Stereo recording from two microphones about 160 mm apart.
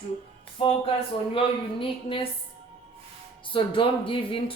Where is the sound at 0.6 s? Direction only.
35° left (ahead or behind).